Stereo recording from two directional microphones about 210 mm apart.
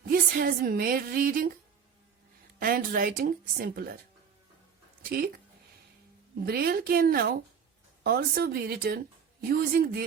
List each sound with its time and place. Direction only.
0.0 s a woman's voice: 40° right (ahead or behind)
2.6 s speech: 45° right (ahead or behind)
5.0 s speech: 45° right (ahead or behind)